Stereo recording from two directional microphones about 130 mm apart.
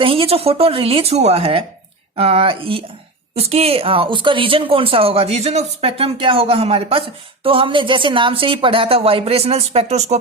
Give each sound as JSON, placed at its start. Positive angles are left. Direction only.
{"t": 0.0, "sound": "speech", "side_deg": -45}